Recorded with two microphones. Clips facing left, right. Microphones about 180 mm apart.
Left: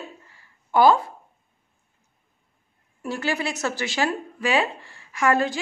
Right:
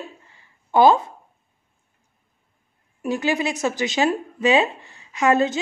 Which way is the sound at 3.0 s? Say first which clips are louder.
Right 4 dB; 15° right (ahead or behind).